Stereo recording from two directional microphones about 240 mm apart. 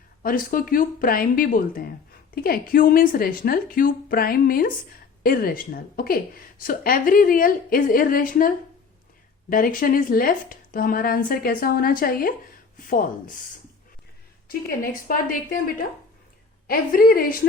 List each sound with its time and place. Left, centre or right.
0.2 s a woman's voice: left
14.8 s a woman's voice: left